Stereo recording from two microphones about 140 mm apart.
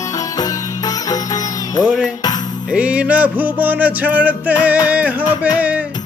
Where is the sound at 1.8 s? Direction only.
5° right (ahead or behind).